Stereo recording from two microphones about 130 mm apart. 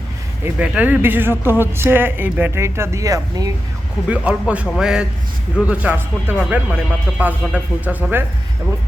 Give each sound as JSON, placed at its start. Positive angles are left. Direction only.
{"t": 0.4, "sound": "speech", "side_deg": -10}
{"t": 4.1, "sound": "speech", "side_deg": -10}